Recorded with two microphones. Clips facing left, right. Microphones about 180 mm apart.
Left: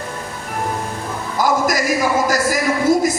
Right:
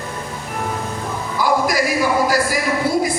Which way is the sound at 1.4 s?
45° left (ahead or behind).